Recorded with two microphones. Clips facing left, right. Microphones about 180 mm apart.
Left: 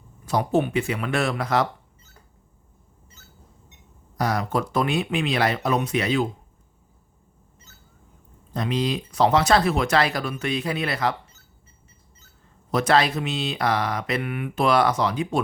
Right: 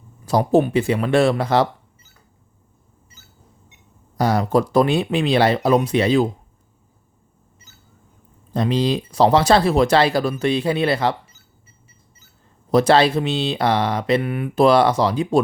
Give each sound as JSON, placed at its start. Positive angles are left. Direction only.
{"t": 0.3, "sound": "speech", "side_deg": -35}
{"t": 4.2, "sound": "speech", "side_deg": -30}
{"t": 8.5, "sound": "speech", "side_deg": -30}
{"t": 12.7, "sound": "speech", "side_deg": -30}